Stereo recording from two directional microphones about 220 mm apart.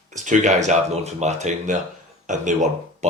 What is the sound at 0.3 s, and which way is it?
Speech, 35° right (ahead or behind).